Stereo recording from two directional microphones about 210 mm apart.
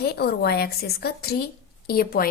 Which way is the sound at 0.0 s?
50° left (ahead or behind).